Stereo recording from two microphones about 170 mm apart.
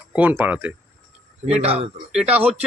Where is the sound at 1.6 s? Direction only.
35° right (ahead or behind).